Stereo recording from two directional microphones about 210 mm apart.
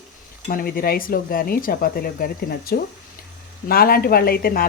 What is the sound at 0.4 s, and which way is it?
Speech, 45° left (ahead or behind).